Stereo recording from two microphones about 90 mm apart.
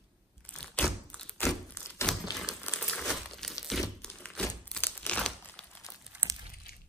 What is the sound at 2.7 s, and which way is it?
Crumpling, 5° left (ahead or behind).